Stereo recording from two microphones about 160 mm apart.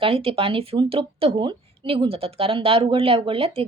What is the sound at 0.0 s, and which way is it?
Speech, 35° right (ahead or behind).